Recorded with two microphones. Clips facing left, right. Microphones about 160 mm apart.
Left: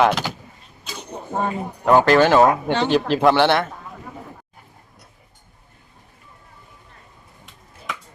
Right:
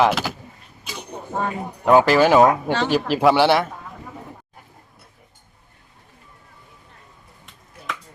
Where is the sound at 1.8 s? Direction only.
5° right (ahead or behind).